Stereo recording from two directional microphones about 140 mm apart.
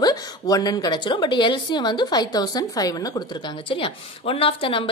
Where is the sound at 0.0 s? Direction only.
30° left (ahead or behind).